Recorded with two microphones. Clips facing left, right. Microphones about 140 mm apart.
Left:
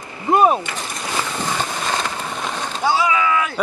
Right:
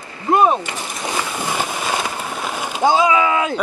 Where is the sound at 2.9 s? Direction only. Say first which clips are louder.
Right 3 dB; 25° right (ahead or behind).